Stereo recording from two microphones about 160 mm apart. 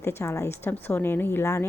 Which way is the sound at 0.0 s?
15° left (ahead or behind).